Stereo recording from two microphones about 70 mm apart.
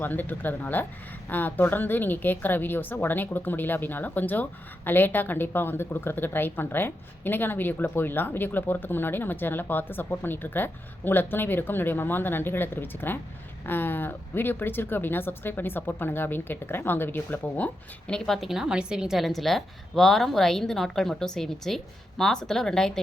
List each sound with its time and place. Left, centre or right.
0.0 s a woman's voice: left
18.1 s a woman's voice: centre